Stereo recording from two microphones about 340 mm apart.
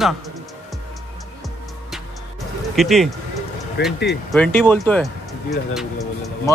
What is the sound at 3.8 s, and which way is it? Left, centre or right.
Speech, left.